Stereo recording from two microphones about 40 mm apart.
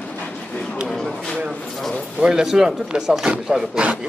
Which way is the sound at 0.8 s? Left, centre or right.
Centre.